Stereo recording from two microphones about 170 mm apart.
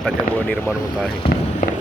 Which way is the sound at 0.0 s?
10° left (ahead or behind).